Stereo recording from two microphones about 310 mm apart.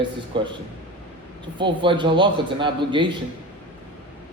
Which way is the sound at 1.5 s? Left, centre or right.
Centre.